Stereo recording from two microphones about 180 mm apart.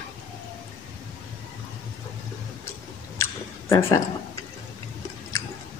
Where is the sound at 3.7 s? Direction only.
15° left (ahead or behind).